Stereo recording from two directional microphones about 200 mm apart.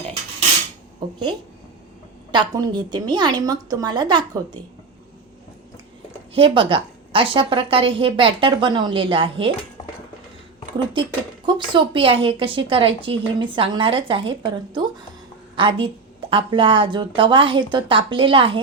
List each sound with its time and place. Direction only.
0.9 s a sound: 20° right (ahead or behind)
2.3 s a woman's voice: 20° right (ahead or behind)
6.3 s a woman's voice: 25° right (ahead or behind)
11.4 s a woman's voice: 25° right (ahead or behind)